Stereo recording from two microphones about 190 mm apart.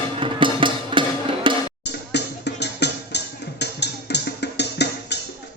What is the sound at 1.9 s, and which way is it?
Music, 65° left (ahead or behind).